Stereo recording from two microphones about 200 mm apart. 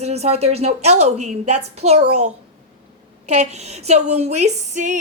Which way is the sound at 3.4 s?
35° right (ahead or behind).